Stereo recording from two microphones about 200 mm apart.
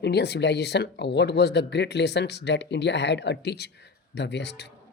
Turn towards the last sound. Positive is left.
turn(degrees=55)  # may be behind; listen again after turning